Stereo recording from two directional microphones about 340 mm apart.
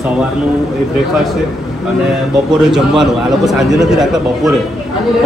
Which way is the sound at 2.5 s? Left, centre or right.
Centre.